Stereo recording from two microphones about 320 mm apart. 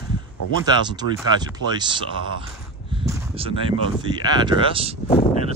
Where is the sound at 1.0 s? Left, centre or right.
Left.